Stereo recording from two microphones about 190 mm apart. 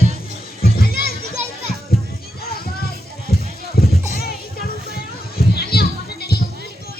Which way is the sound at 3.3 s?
55° left (ahead or behind).